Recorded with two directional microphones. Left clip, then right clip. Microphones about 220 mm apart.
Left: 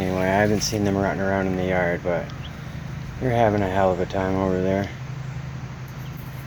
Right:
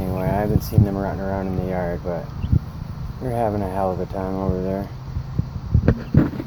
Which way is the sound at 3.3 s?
35° left (ahead or behind).